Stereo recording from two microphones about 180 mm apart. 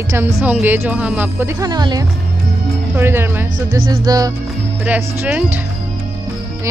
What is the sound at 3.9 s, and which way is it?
Music, 20° right (ahead or behind).